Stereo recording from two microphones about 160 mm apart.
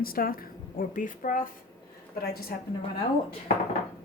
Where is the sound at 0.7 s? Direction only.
55° left (ahead or behind).